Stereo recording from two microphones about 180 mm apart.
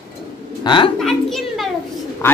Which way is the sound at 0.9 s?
Centre (ahead or behind).